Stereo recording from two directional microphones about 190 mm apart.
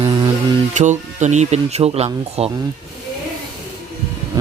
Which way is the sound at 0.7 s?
40° right (ahead or behind).